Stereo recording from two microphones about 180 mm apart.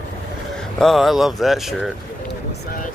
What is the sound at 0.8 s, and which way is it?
Speech, centre (ahead or behind).